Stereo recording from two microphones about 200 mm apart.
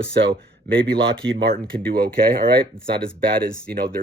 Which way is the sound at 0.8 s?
50° right (ahead or behind).